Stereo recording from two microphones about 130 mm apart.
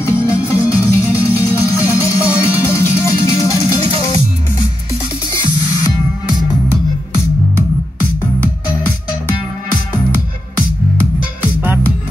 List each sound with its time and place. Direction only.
0.0 s music: 25° left (ahead or behind)
8.2 s music: 15° left (ahead or behind)
11.4 s music: 15° right (ahead or behind)